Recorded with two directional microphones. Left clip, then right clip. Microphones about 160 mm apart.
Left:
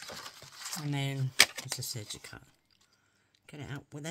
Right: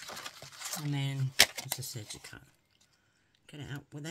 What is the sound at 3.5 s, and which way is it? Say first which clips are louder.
Speech: left 1 dB; 40° left (ahead or behind).